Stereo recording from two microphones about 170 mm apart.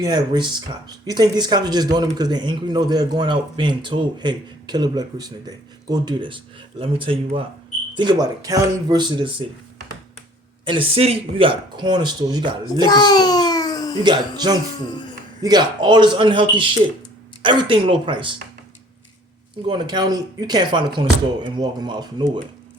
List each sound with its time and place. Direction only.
0.0 s speech: 25° right (ahead or behind)
10.7 s speech: 35° right (ahead or behind)
12.8 s a sound: 25° left (ahead or behind)
14.0 s speech: 25° right (ahead or behind)
14.8 s speech: 25° left (ahead or behind)
15.4 s speech: 25° right (ahead or behind)
19.6 s speech: 25° right (ahead or behind)